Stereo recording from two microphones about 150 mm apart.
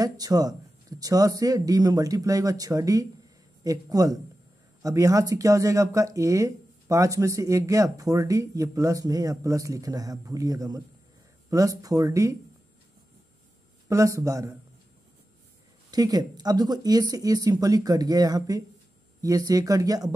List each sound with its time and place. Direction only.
0.0 s speech: 25° right (ahead or behind)
13.8 s speech: 20° right (ahead or behind)
15.9 s speech: 25° right (ahead or behind)